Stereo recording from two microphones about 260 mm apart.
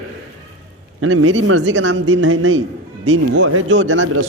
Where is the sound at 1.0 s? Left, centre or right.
Right.